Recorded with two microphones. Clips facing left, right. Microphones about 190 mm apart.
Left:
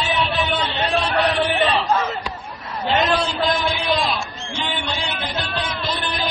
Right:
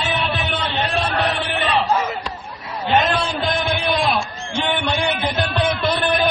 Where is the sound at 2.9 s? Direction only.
55° right (ahead or behind).